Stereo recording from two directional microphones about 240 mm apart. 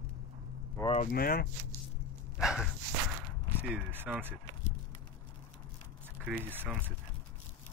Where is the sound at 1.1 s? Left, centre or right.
Left.